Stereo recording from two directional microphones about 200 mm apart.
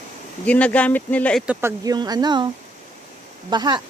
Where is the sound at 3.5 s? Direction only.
20° right (ahead or behind).